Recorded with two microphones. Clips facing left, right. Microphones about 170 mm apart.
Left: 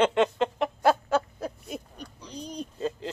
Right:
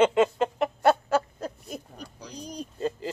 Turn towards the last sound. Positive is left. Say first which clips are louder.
# right 1 dB
turn(degrees=0)  # may be behind; listen again after turning